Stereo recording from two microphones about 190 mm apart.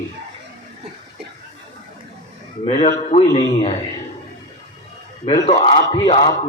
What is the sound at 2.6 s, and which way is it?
A man's voice, 30° left (ahead or behind).